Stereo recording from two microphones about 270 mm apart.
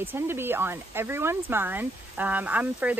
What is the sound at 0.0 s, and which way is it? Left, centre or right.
Speech, centre.